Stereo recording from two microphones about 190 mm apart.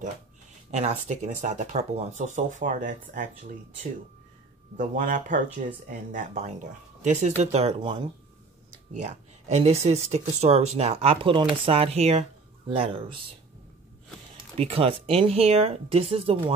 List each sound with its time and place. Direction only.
0.7 s speech: 35° right (ahead or behind)
4.7 s speech: 45° right (ahead or behind); by 13.2 s 30° right (ahead or behind)
14.6 s speech: 30° right (ahead or behind)